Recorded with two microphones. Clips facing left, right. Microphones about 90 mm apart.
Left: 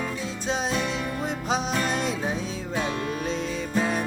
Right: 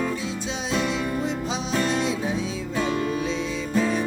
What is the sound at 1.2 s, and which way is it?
Music, 45° left (ahead or behind).